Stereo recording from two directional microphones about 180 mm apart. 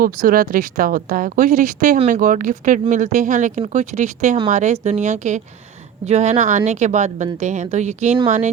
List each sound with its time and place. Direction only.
0.0 s speech: 50° right (ahead or behind)